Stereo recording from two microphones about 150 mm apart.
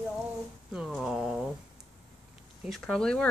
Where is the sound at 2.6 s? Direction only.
5° left (ahead or behind).